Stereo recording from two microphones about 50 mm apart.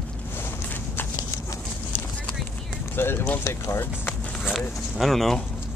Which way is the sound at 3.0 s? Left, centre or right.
Left.